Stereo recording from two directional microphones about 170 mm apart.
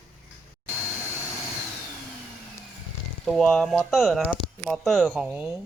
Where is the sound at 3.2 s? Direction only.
Centre (ahead or behind).